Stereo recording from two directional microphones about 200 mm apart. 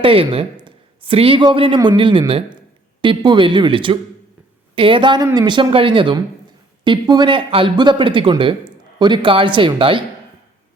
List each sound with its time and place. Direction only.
0.0 s speech: 25° right (ahead or behind)